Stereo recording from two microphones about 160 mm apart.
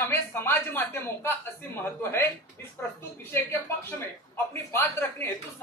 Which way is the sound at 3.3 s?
15° left (ahead or behind).